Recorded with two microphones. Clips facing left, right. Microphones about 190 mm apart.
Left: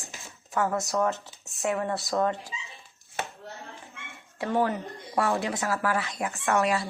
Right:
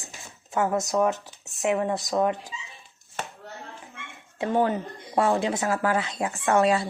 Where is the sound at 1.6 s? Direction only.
15° right (ahead or behind).